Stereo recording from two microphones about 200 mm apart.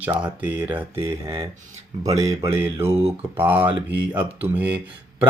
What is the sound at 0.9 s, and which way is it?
Speech, 25° right (ahead or behind).